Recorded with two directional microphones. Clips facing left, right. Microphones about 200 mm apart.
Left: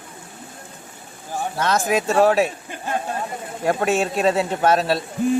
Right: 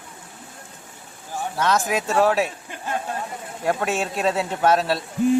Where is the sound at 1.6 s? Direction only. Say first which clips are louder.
Left 1 dB; centre (ahead or behind).